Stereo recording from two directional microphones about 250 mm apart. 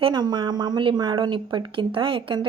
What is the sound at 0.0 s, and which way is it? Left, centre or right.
A woman's voice, centre.